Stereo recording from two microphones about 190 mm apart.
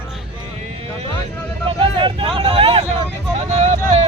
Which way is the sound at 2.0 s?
25° right (ahead or behind).